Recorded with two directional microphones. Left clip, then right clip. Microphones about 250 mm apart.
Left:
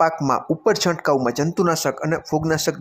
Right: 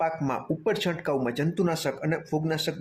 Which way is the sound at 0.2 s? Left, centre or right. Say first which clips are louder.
Left 9 dB; centre.